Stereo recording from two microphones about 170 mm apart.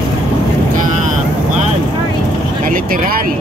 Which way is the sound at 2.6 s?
55° right (ahead or behind).